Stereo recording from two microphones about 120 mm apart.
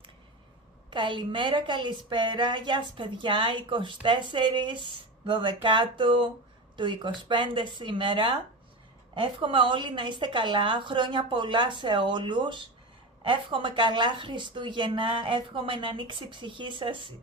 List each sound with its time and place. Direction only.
0.9 s a woman's voice: 40° right (ahead or behind)